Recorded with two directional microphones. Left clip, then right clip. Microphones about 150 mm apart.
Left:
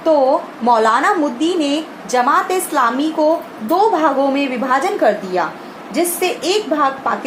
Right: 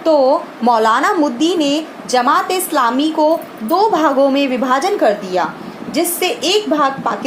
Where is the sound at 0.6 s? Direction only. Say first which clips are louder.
Even; 30° right (ahead or behind).